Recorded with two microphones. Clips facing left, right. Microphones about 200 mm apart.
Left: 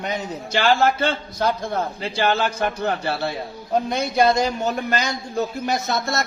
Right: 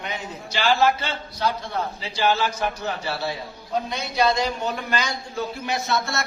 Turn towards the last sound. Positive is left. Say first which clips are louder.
# left 2 dB
turn(degrees=40)  # may be behind; listen again after turning